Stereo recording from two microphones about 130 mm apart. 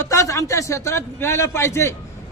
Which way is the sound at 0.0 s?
25° left (ahead or behind).